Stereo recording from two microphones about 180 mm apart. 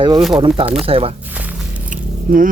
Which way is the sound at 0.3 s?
30° right (ahead or behind).